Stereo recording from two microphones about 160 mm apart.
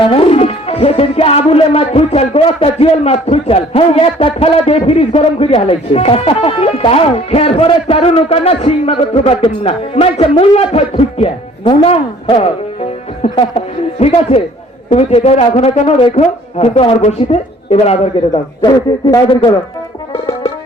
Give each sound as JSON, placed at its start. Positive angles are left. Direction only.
{"t": 0.0, "sound": "music", "side_deg": 35}
{"t": 18.3, "sound": "a man's voice", "side_deg": 25}